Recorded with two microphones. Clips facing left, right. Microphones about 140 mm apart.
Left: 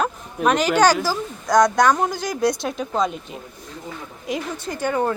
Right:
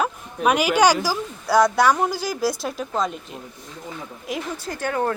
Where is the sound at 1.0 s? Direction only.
10° right (ahead or behind).